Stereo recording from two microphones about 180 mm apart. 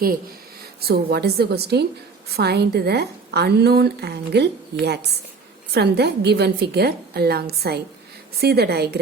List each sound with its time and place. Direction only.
0.9 s a woman's voice: 60° right (ahead or behind)
5.7 s a woman's voice: 65° right (ahead or behind)